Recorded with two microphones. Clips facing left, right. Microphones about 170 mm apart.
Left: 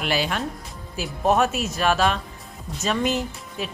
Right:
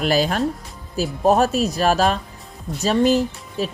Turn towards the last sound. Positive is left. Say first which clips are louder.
# right 6 dB
turn(degrees=-35)  # may be behind; listen again after turning